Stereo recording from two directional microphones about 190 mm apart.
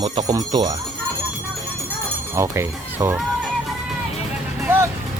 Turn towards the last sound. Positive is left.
turn(degrees=-10)  # may be behind; listen again after turning